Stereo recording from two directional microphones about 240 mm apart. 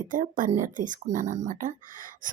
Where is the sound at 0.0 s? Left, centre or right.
Right.